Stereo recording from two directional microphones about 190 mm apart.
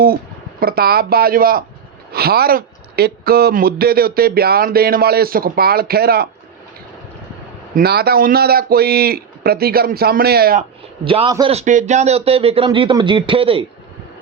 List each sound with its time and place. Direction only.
0.6 s speech: 55° right (ahead or behind)
7.8 s speech: 55° right (ahead or behind)
11.0 s a man's voice: 30° right (ahead or behind)
11.5 s a man's voice: 40° right (ahead or behind)